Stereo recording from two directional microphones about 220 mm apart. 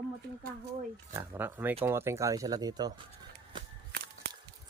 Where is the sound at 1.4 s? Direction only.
10° right (ahead or behind).